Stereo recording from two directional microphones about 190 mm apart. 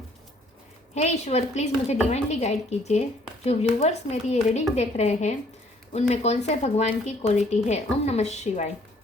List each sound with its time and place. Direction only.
0.9 s speech: 35° left (ahead or behind)